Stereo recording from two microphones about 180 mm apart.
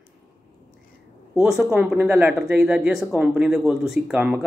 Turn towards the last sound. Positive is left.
turn(degrees=-5)  # may be behind; listen again after turning